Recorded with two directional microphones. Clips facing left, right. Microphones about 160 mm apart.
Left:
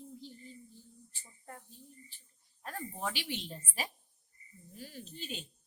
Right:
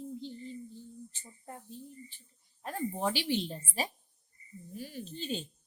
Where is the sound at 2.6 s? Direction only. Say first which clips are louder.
Right 6 dB; 30° right (ahead or behind).